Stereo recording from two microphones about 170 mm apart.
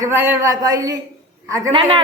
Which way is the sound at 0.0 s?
15° right (ahead or behind).